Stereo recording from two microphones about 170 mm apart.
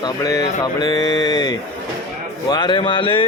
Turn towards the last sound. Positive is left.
turn(degrees=30)  # may be behind; listen again after turning